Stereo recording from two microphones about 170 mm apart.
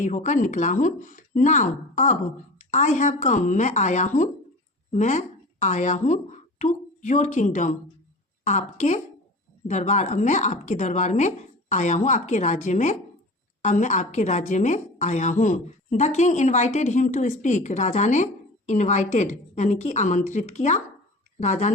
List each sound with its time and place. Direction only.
0.0 s a woman's voice: 45° left (ahead or behind)